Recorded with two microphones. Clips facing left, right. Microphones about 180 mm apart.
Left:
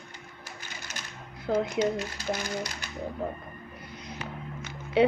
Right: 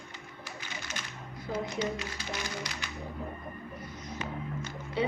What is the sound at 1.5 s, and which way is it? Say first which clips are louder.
Speech: left 8 dB; 70° left (ahead or behind).